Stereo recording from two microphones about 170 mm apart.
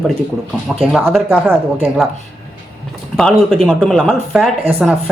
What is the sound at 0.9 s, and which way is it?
Speech, 10° right (ahead or behind).